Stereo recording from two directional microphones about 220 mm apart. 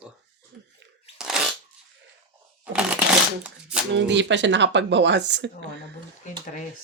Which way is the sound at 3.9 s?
55° right (ahead or behind).